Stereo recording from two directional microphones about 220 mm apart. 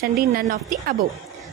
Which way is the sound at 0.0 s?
45° right (ahead or behind).